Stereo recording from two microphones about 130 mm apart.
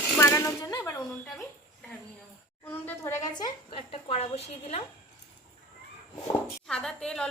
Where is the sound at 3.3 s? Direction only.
40° left (ahead or behind); by 4.8 s 55° left (ahead or behind).